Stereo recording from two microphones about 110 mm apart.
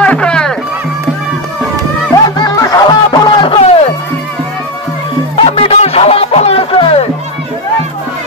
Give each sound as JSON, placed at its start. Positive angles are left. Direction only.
{"t": 0.0, "sound": "music", "side_deg": 10}
{"t": 2.5, "sound": "music", "side_deg": 30}
{"t": 3.4, "sound": "music", "side_deg": 60}
{"t": 5.4, "sound": "music", "side_deg": 60}